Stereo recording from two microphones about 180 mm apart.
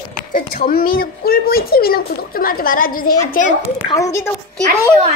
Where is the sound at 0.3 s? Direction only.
55° left (ahead or behind).